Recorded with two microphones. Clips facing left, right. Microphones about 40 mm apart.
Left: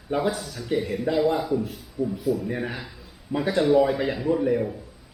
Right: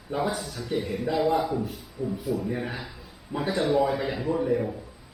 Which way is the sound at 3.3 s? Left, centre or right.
Centre.